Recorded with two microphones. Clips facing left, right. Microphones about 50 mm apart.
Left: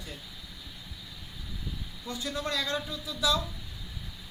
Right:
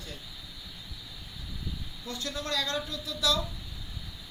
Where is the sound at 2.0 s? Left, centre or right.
Centre.